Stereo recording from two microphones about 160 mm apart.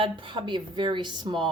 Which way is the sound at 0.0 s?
30° right (ahead or behind).